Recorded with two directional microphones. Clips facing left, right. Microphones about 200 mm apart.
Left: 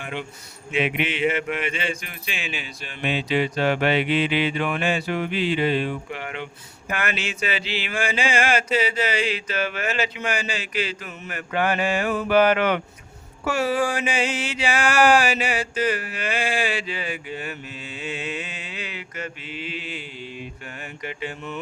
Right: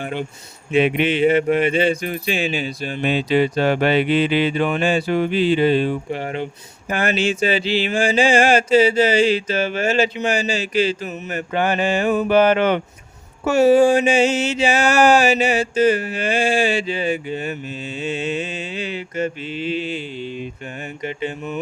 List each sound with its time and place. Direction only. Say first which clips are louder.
0.0 s speech: right 6 dB; 40° right (ahead or behind)
11.1 s mantra: right 5 dB; 25° right (ahead or behind)